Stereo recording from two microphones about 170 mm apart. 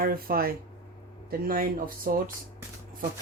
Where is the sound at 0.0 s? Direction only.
60° right (ahead or behind).